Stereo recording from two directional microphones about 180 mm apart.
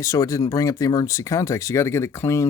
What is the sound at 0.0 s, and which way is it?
Speech, 20° left (ahead or behind).